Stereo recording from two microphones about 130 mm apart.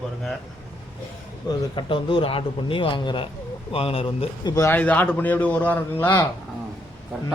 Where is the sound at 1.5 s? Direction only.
40° left (ahead or behind).